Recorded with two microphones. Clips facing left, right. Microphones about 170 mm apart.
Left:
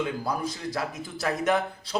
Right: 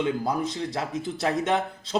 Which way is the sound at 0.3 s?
20° right (ahead or behind).